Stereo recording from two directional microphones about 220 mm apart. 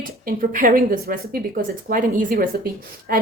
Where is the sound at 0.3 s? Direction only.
40° right (ahead or behind).